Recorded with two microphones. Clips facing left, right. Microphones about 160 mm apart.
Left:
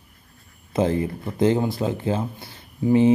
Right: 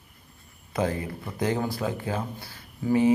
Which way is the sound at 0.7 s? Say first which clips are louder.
Left 6 dB; 25° left (ahead or behind).